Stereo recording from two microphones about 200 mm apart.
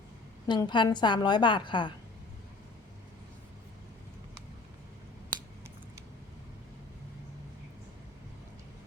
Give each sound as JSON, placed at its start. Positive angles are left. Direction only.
{"t": 0.4, "sound": "a woman's voice", "side_deg": 20}